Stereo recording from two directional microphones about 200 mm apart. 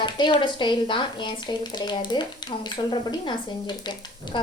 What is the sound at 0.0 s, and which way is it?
Speech, 25° left (ahead or behind).